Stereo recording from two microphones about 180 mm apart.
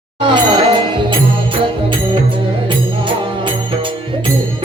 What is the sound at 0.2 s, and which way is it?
Music, 25° right (ahead or behind).